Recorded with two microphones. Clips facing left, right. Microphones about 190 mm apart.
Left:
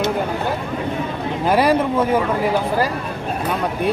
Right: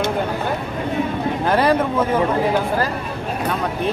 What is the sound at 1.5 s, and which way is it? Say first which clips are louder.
Speech: left 1 dB; 10° left (ahead or behind).